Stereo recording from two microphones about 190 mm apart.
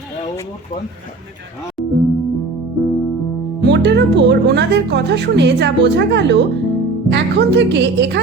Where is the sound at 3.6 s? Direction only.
65° right (ahead or behind).